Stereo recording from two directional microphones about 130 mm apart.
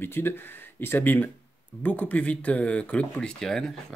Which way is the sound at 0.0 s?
15° left (ahead or behind).